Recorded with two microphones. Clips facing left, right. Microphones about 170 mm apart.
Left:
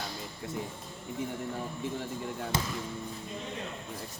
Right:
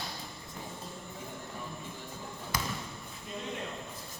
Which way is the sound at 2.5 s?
25° left (ahead or behind).